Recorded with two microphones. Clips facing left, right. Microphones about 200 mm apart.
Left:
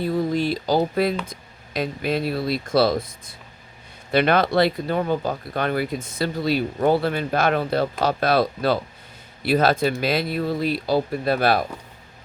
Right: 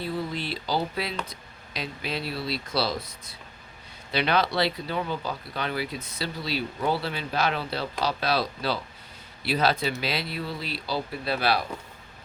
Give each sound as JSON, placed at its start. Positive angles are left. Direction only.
{"t": 0.0, "sound": "speech", "side_deg": 45}